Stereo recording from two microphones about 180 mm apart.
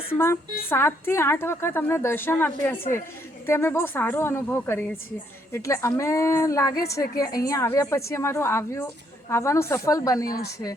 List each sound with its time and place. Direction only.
0.1 s a woman's voice: 15° left (ahead or behind)